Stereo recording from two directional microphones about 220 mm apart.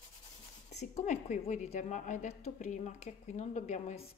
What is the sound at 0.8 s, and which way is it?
A woman's voice, 30° left (ahead or behind).